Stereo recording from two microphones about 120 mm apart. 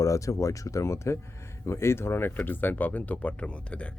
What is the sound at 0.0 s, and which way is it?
Speech, 25° left (ahead or behind).